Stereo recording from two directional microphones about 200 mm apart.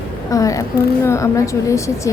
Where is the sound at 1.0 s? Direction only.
15° left (ahead or behind).